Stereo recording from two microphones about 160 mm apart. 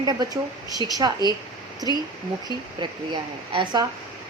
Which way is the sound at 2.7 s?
30° right (ahead or behind).